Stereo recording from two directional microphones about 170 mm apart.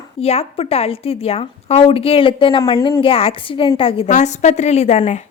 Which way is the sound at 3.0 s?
35° left (ahead or behind).